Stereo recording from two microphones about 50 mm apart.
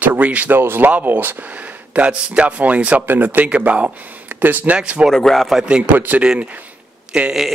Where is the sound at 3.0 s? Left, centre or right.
Right.